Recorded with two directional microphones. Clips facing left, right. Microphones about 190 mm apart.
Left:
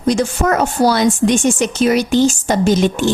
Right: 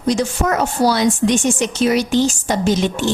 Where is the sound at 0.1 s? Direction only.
50° left (ahead or behind).